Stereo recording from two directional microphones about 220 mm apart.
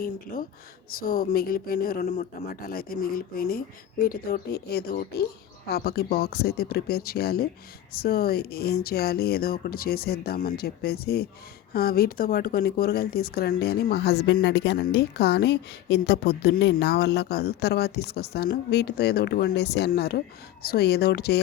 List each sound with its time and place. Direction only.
1.0 s speech: 40° left (ahead or behind)